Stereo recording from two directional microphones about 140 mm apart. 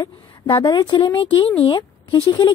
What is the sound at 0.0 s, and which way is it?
A woman's voice, 35° left (ahead or behind).